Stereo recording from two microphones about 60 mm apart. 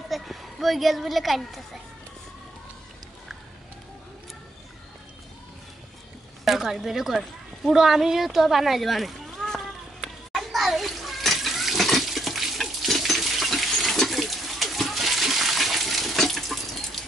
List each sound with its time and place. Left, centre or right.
0.1 s speech: centre
6.4 s speech: centre
9.9 s water: centre